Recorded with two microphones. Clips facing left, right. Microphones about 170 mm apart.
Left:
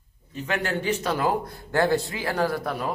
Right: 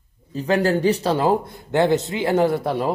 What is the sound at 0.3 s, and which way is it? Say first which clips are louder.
Speech: right 9 dB; 35° right (ahead or behind).